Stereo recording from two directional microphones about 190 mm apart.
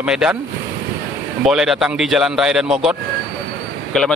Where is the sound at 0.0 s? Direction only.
5° right (ahead or behind).